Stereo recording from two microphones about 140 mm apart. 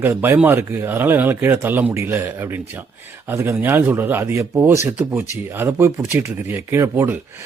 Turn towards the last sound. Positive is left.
turn(degrees=-15)  # may be behind; listen again after turning